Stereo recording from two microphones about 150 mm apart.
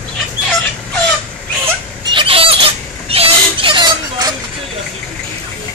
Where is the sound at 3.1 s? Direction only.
40° right (ahead or behind).